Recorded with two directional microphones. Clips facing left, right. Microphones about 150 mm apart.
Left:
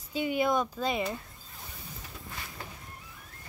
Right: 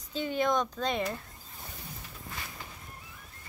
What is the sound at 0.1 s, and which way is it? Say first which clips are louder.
Speech: left 1 dB; 10° left (ahead or behind).